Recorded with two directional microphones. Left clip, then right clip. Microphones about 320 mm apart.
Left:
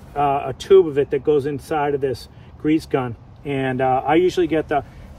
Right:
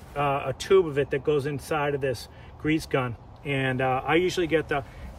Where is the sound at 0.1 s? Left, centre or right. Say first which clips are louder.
Left 7 dB; centre.